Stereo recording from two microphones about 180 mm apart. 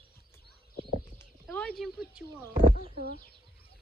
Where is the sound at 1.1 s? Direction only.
10° left (ahead or behind).